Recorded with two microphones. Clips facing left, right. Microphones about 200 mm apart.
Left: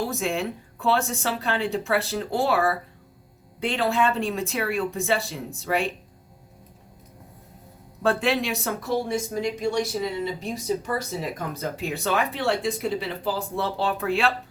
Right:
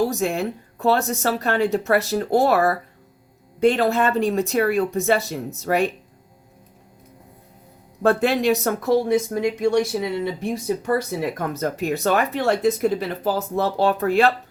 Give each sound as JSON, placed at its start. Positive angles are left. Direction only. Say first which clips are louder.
{"t": 0.0, "sound": "speech", "louder": "right 5 dB", "side_deg": -40}
{"t": 8.2, "sound": "speech", "louder": "right 6 dB", "side_deg": -40}
{"t": 8.6, "sound": "speech", "louder": "right 7 dB", "side_deg": -50}
{"t": 12.0, "sound": "speech", "louder": "right 4 dB", "side_deg": -40}